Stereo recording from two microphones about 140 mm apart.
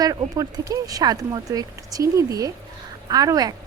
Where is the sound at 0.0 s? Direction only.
25° right (ahead or behind).